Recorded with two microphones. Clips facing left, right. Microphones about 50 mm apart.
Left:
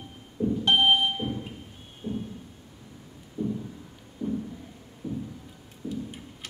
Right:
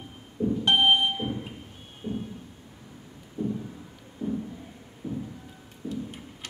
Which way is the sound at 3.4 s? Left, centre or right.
Right.